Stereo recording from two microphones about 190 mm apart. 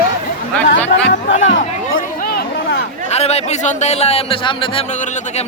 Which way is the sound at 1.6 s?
45° left (ahead or behind).